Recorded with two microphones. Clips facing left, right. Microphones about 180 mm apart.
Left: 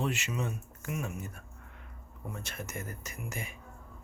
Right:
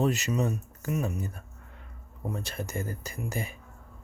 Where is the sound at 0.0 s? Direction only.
40° right (ahead or behind).